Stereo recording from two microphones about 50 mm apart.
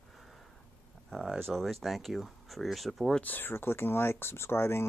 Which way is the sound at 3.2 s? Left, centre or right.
Left.